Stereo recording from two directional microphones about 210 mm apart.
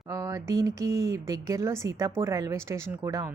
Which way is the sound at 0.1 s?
15° right (ahead or behind).